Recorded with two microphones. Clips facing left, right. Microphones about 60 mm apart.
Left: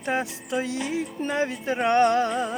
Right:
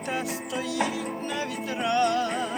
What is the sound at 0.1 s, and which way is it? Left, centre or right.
Music, left.